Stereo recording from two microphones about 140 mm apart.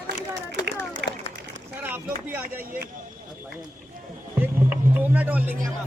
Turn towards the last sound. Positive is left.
turn(degrees=-10)  # may be behind; listen again after turning